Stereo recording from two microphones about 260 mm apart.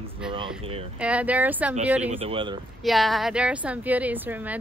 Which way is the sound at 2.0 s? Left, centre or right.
Right.